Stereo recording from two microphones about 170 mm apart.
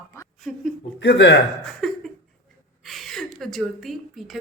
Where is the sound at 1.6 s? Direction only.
Centre (ahead or behind).